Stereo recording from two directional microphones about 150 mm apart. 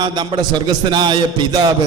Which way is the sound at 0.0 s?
30° right (ahead or behind).